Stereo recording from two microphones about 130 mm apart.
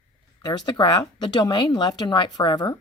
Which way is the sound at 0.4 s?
35° left (ahead or behind).